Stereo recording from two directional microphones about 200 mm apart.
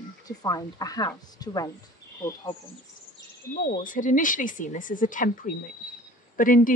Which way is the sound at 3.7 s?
40° left (ahead or behind).